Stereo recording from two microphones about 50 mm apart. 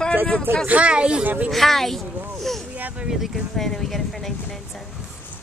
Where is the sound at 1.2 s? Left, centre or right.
Right.